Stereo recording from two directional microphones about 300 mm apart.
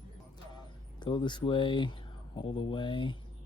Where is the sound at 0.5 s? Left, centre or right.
Centre.